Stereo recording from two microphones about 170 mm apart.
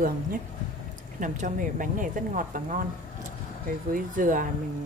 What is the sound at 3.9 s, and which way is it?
Speech, 50° right (ahead or behind).